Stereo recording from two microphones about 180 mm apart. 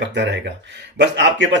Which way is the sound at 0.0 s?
85° right.